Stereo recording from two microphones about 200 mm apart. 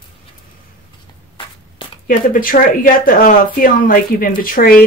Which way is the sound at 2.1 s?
45° left (ahead or behind).